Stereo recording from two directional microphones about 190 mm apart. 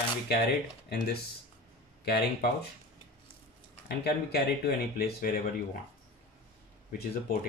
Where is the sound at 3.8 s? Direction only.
55° left (ahead or behind).